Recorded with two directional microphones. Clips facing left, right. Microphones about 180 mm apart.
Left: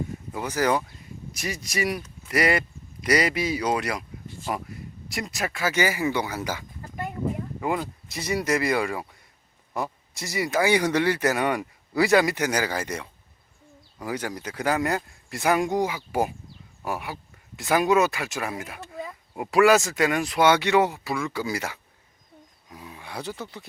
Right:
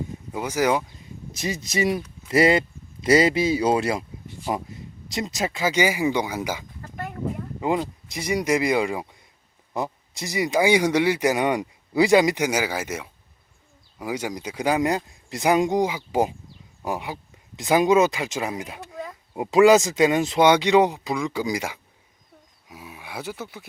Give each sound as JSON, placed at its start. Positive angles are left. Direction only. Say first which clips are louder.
{"t": 0.3, "sound": "speech", "louder": "right 2 dB", "side_deg": -10}